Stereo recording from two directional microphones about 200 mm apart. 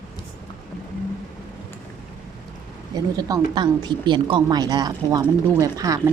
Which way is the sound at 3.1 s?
20° right (ahead or behind).